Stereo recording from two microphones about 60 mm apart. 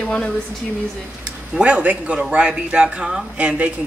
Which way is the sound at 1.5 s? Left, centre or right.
Centre.